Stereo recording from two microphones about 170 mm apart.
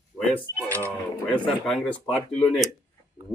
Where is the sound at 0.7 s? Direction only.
15° right (ahead or behind).